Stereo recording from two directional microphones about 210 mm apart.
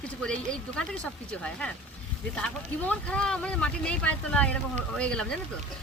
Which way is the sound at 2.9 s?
5° left (ahead or behind).